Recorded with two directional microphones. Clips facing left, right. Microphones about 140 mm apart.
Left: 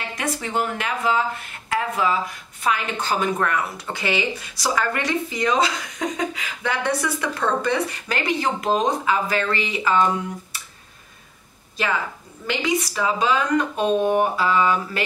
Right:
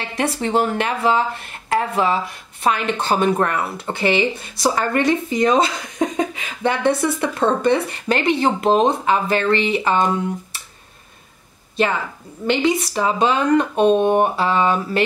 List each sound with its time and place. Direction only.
0.1 s a woman's voice: 30° right (ahead or behind)
12.4 s speech: 30° right (ahead or behind)